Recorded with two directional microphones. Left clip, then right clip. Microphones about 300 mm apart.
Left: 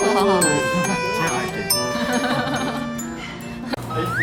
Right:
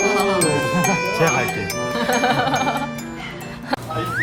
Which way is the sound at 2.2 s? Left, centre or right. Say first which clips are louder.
Right 4 dB; right.